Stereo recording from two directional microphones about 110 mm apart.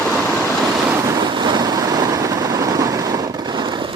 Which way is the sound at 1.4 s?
40° right (ahead or behind).